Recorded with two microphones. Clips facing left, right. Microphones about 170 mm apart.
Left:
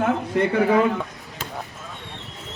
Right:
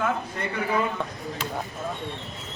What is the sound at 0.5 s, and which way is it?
Speech, 65° left (ahead or behind).